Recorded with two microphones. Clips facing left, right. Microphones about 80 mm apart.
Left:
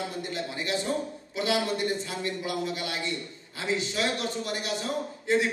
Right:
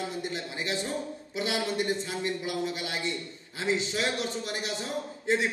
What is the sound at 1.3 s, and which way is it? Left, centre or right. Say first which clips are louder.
A man's voice: left 3 dB; right.